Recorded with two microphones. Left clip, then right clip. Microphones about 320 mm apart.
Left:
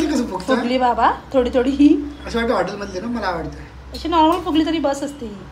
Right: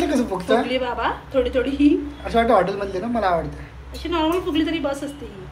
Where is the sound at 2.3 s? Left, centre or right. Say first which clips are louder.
Right 3 dB; centre.